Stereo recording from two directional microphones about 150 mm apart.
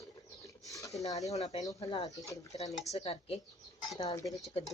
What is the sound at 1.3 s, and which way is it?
Speech, 45° left (ahead or behind).